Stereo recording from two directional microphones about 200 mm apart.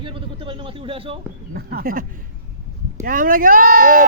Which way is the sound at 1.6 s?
50° right (ahead or behind).